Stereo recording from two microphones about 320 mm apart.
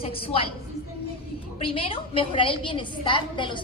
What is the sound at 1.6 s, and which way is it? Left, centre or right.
A woman's voice, centre.